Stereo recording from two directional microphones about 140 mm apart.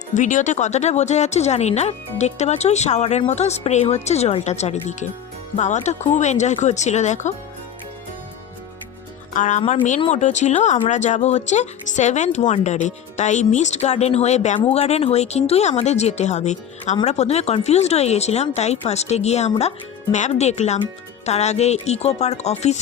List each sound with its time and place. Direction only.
0.1 s speech: 65° left (ahead or behind)
9.3 s speech: 65° left (ahead or behind)